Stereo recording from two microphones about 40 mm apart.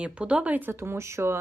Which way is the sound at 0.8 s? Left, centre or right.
Right.